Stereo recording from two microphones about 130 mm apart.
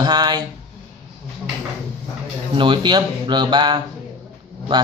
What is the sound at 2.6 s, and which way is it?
A man's voice, 40° right (ahead or behind).